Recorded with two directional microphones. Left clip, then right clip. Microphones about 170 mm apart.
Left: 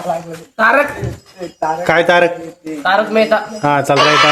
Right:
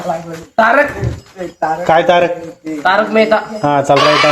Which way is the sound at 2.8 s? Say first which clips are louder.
Right 1 dB; 15° left (ahead or behind).